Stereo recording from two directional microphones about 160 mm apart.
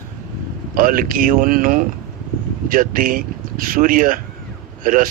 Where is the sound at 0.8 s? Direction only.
60° right (ahead or behind).